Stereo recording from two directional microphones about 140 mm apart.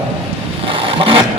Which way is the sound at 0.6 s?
40° right (ahead or behind).